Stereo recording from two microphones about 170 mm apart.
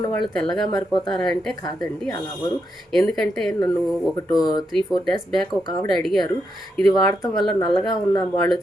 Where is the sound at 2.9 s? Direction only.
5° left (ahead or behind).